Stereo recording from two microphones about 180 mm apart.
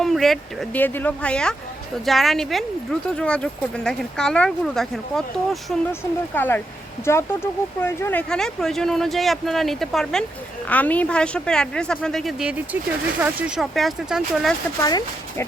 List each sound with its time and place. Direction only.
0.0 s speech: centre (ahead or behind)
5.9 s speech: 10° left (ahead or behind)
14.8 s speech: 20° left (ahead or behind)